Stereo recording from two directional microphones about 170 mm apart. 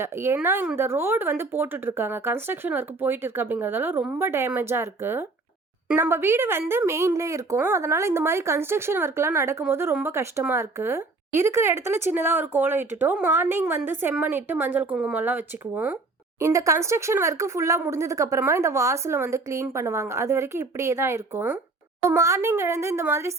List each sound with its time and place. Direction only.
0.0 s a woman's voice: 15° right (ahead or behind)